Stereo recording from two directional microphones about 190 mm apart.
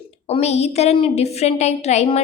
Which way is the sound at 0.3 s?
35° left (ahead or behind).